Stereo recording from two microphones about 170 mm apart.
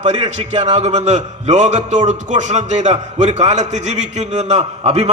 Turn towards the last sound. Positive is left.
turn(degrees=-40)  # may be behind; listen again after turning